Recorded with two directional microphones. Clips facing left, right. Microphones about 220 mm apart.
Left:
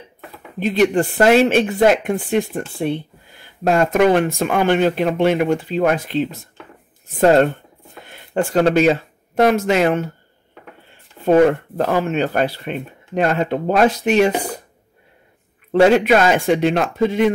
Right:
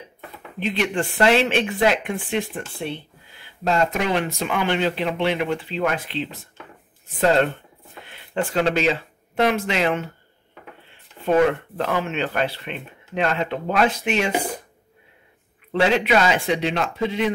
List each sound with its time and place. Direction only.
0.6 s speech: 40° left (ahead or behind)
11.2 s speech: 40° left (ahead or behind)
15.7 s speech: 45° left (ahead or behind)